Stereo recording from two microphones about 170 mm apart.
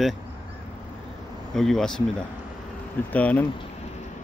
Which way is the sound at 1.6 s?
Centre (ahead or behind).